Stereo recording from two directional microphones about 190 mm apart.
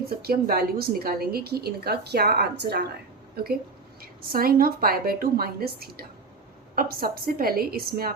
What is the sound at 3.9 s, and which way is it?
A woman's voice, 50° right (ahead or behind).